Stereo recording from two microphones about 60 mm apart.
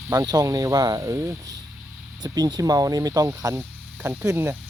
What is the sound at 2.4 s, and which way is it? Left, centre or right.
Speech, right.